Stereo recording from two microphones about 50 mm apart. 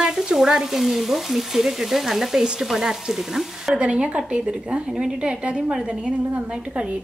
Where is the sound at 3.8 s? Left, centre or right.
Right.